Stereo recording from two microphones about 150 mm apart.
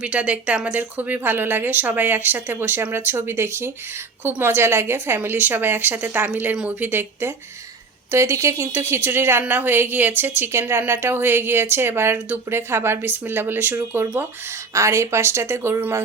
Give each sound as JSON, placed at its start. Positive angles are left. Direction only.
{"t": 0.0, "sound": "a woman's voice", "side_deg": -10}